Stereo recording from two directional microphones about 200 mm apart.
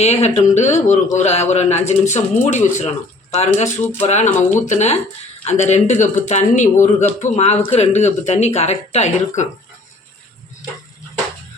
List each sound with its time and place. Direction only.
0.0 s speech: 30° left (ahead or behind)